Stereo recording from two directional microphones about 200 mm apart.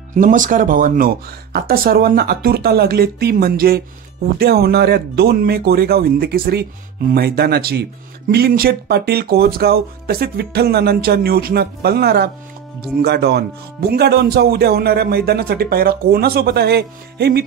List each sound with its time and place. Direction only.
0.1 s speech: 40° right (ahead or behind)